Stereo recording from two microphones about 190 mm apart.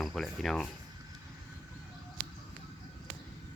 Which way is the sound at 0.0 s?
Centre (ahead or behind).